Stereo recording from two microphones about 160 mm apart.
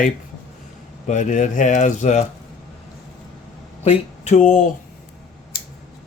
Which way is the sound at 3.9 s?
45° left (ahead or behind).